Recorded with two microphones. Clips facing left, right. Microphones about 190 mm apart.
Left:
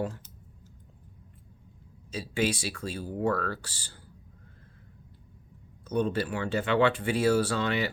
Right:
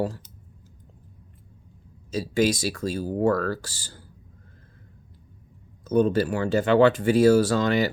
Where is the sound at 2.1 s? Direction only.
40° right (ahead or behind).